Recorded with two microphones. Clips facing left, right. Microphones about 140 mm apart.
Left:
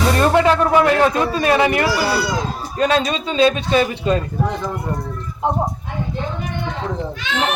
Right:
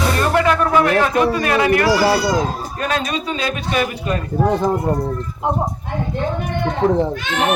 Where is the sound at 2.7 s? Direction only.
25° left (ahead or behind).